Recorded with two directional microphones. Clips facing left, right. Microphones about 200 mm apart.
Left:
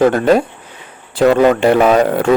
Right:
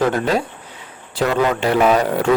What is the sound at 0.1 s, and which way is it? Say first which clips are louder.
Speech: left 7 dB; 55° left (ahead or behind).